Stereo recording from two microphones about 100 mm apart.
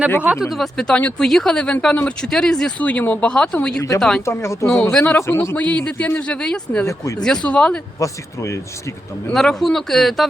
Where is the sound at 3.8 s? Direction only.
35° left (ahead or behind).